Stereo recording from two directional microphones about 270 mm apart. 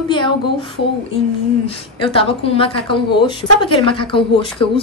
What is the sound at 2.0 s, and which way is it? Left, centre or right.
A woman's voice, centre.